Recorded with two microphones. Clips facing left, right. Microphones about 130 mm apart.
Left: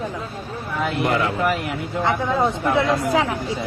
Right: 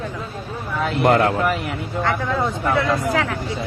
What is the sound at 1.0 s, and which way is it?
Speech, 55° right (ahead or behind).